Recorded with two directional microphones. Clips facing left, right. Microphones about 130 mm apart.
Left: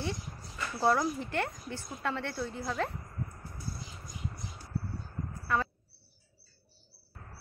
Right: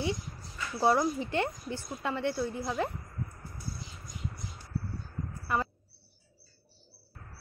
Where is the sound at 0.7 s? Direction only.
15° right (ahead or behind).